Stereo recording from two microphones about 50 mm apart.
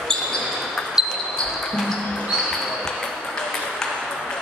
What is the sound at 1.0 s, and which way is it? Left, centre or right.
Basketball bounce, centre.